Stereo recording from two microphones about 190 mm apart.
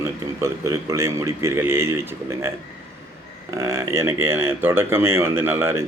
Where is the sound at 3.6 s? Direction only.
15° right (ahead or behind).